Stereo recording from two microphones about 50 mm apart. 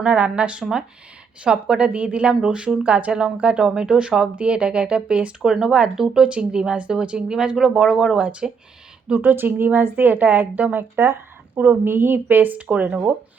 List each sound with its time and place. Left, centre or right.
0.0 s speech: right
0.6 s speech: centre
1.9 s speech: right
2.3 s speech: centre
5.4 s speech: centre; by 9.3 s right
9.3 s a woman's voice: right